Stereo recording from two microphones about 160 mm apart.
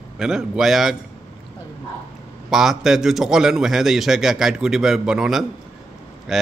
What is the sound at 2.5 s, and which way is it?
Speech, centre (ahead or behind).